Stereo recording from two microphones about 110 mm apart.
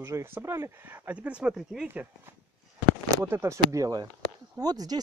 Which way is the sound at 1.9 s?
20° right (ahead or behind).